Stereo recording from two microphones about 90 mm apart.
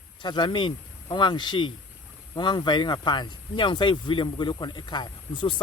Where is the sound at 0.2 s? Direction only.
60° left (ahead or behind).